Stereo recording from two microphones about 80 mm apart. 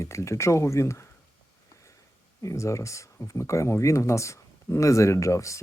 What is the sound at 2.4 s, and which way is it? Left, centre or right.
Speech, left.